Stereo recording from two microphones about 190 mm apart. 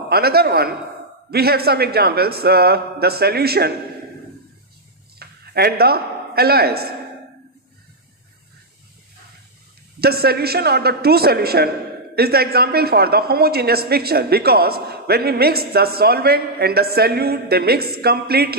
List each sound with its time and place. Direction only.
0.1 s a woman's voice: 55° right (ahead or behind)
5.2 s a man's voice: 55° right (ahead or behind)
9.9 s a woman's voice: 55° right (ahead or behind)